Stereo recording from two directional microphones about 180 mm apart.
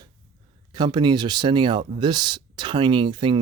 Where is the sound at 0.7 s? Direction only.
25° right (ahead or behind).